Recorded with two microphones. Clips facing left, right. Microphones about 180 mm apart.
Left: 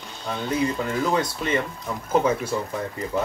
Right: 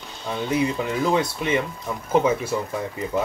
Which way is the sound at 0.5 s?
15° right (ahead or behind).